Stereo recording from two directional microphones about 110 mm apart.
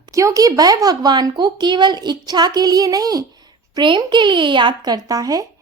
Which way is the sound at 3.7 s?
45° right (ahead or behind).